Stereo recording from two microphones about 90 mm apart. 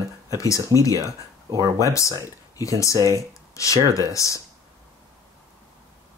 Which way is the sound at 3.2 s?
35° left (ahead or behind).